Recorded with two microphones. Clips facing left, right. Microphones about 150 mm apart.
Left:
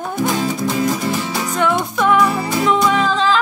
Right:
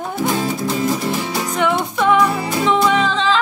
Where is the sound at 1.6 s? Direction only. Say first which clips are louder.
Left 1 dB; 25° right (ahead or behind).